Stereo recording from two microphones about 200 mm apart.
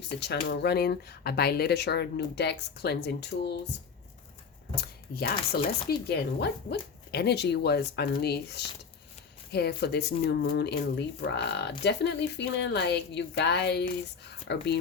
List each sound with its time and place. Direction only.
0.2 s speech: 55° left (ahead or behind)
4.8 s speech: 50° left (ahead or behind)